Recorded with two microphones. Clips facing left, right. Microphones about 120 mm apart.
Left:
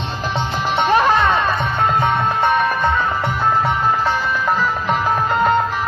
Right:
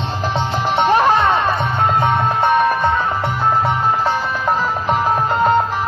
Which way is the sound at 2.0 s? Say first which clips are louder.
Right 1 dB; 25° right (ahead or behind).